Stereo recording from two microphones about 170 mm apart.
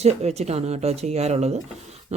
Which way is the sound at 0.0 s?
40° right (ahead or behind).